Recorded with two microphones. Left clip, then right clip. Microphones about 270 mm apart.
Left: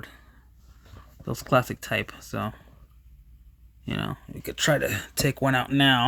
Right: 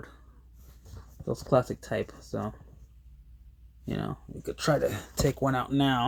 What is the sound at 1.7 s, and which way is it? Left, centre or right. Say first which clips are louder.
Speech: left 4 dB; left.